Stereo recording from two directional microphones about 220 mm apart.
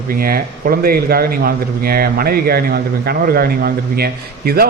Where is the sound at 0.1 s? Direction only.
40° right (ahead or behind).